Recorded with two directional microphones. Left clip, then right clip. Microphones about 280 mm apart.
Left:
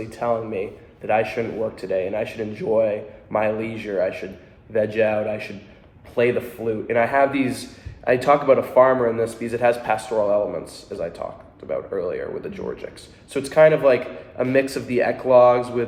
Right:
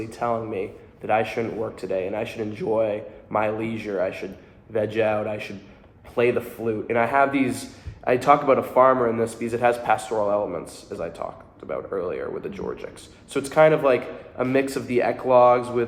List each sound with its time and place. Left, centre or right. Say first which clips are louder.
0.0 s a man's voice: left 2 dB; centre